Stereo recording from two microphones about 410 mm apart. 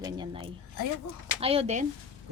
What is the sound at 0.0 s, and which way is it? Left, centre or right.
A woman's voice, centre.